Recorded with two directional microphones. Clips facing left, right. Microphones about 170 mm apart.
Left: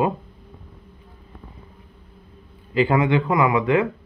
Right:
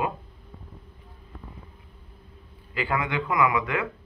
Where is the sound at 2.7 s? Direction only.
25° left (ahead or behind).